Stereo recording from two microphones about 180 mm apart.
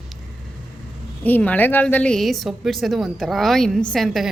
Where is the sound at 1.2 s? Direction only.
10° left (ahead or behind).